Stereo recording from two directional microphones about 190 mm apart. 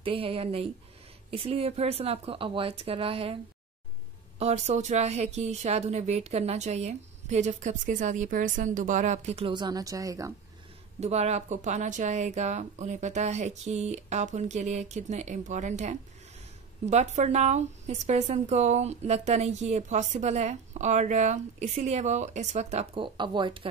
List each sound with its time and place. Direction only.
0.0 s speech: 30° right (ahead or behind)
4.4 s speech: 35° right (ahead or behind); by 10.3 s 15° right (ahead or behind)
11.0 s speech: 35° right (ahead or behind)